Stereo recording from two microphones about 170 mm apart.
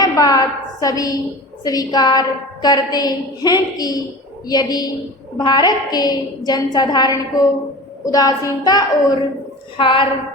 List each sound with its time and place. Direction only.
0.0 s a woman's voice: 20° left (ahead or behind)